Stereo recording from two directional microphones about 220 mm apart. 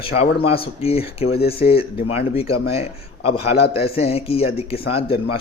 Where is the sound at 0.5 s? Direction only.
25° left (ahead or behind).